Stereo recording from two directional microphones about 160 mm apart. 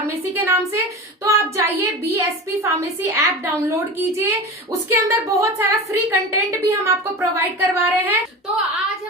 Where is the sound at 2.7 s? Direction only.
15° right (ahead or behind).